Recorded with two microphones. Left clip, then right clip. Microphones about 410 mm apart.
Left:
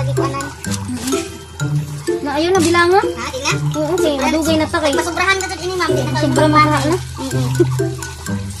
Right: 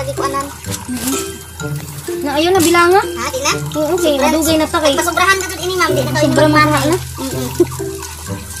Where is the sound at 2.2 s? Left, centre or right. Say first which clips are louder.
Right 3 dB; left.